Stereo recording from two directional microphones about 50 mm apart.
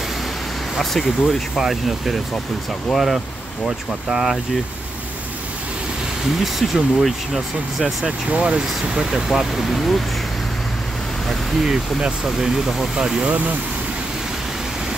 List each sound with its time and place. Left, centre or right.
0.9 s speech: centre
6.4 s speech: centre
8.3 s speech: right
9.1 s speech: centre
11.6 s speech: centre